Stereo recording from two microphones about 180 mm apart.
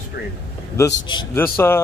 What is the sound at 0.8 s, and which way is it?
Speech, 20° left (ahead or behind).